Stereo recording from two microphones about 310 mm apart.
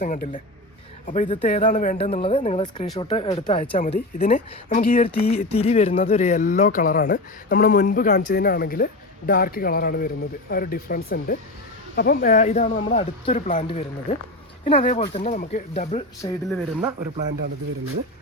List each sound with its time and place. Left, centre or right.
0.0 s speech: left
16.5 s speech: centre